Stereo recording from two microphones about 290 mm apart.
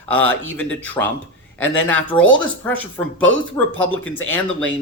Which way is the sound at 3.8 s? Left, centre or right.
Left.